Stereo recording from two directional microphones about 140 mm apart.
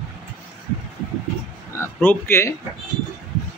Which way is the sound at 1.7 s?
15° left (ahead or behind).